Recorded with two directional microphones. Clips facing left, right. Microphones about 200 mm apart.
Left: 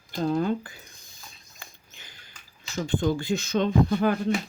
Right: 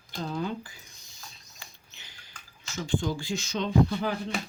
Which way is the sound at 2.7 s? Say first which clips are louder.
Left 4 dB; 60° left (ahead or behind).